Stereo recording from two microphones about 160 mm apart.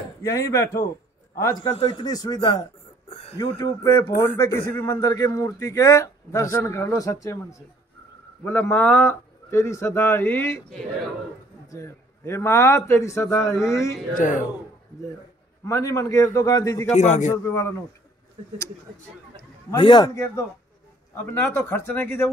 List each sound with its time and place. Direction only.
0.2 s a man's voice: 20° left (ahead or behind)
3.1 s a sound: 40° left (ahead or behind)
3.3 s a man's voice: 20° left (ahead or behind)
8.5 s a man's voice: 15° left (ahead or behind)
11.7 s a man's voice: 20° left (ahead or behind)
14.1 s speech: 55° left (ahead or behind)
15.6 s a man's voice: 20° left (ahead or behind)
16.9 s a man's voice: 45° left (ahead or behind)
17.5 s a man's voice: 20° left (ahead or behind)
19.7 s a man's voice: 30° left (ahead or behind)
21.1 s a man's voice: 15° left (ahead or behind)